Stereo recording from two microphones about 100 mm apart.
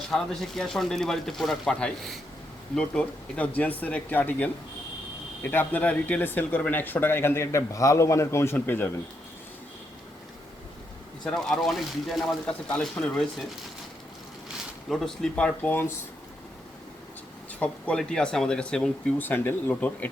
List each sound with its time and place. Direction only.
0.1 s speech: 5° left (ahead or behind); by 8.9 s 20° left (ahead or behind)
11.3 s speech: 5° left (ahead or behind)
14.8 s speech: 5° left (ahead or behind); by 16.0 s 20° left (ahead or behind)
17.6 s speech: 10° left (ahead or behind)
19.2 s speech: 20° left (ahead or behind)